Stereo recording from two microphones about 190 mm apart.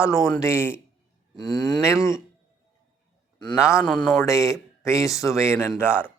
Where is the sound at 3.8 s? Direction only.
5° left (ahead or behind).